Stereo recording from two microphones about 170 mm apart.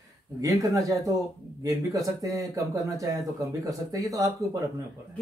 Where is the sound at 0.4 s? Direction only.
20° right (ahead or behind).